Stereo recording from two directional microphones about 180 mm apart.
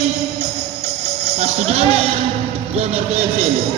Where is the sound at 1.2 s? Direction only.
40° right (ahead or behind).